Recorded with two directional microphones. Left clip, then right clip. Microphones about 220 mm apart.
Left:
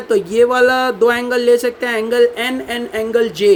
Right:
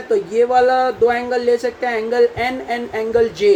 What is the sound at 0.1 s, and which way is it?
Speech, 40° left (ahead or behind).